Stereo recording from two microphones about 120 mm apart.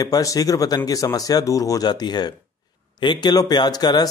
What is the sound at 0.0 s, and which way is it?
Speech, 30° left (ahead or behind).